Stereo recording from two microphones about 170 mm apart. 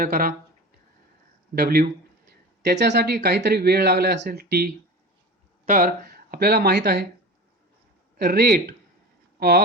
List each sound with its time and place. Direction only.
0.0 s speech: 55° right (ahead or behind)
1.5 s speech: 60° right (ahead or behind)
2.6 s speech: 90° right; by 4.7 s 65° right (ahead or behind)
5.6 s speech: 55° right (ahead or behind); by 7.0 s 75° right (ahead or behind)
8.2 s speech: 70° right (ahead or behind)